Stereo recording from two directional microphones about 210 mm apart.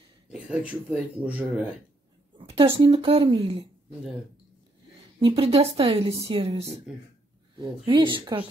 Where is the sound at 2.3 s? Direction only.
25° right (ahead or behind).